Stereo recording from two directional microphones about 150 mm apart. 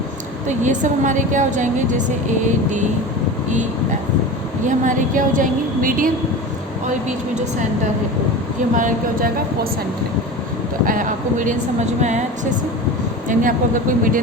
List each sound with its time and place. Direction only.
0.4 s a woman's voice: 55° right (ahead or behind)
4.6 s a woman's voice: 60° right (ahead or behind)
8.7 s a woman's voice: 60° right (ahead or behind)
10.8 s a woman's voice: 65° right (ahead or behind)
13.2 s a woman's voice: 65° right (ahead or behind)